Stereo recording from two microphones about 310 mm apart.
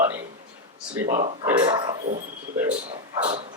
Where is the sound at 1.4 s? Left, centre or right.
Centre.